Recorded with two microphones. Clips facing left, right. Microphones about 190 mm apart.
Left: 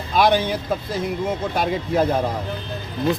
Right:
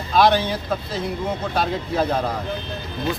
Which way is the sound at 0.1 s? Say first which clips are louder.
Right 1 dB; 15° left (ahead or behind).